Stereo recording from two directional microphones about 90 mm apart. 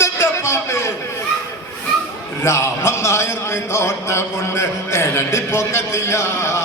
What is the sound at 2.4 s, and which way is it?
A man's voice, 30° left (ahead or behind).